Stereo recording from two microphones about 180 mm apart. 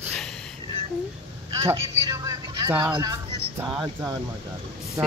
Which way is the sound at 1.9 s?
25° right (ahead or behind).